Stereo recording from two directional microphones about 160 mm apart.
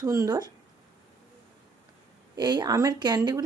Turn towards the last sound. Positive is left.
turn(degrees=-25)  # may be behind; listen again after turning